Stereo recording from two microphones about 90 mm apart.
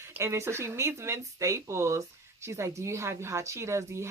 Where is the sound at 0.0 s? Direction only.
30° right (ahead or behind).